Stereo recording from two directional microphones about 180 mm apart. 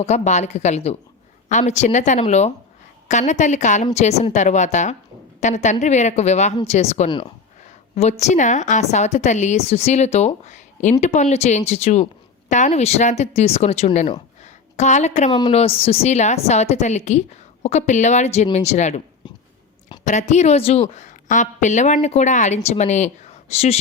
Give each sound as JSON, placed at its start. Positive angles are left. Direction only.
{"t": 0.0, "sound": "a woman's voice", "side_deg": 40}
{"t": 8.2, "sound": "a woman's voice", "side_deg": 40}
{"t": 14.4, "sound": "a sound", "side_deg": 40}
{"t": 15.4, "sound": "a woman's voice", "side_deg": 30}
{"t": 20.1, "sound": "a woman's voice", "side_deg": 40}